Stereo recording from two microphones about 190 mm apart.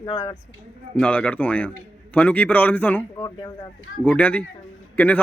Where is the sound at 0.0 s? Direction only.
20° left (ahead or behind).